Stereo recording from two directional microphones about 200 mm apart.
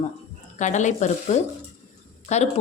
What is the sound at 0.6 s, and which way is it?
Speech, 35° left (ahead or behind).